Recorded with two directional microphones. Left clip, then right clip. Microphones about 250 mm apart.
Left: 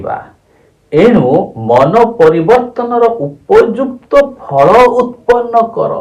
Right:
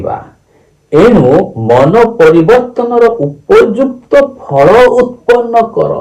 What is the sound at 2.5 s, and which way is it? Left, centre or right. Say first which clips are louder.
Brass instrument: right 2 dB; left.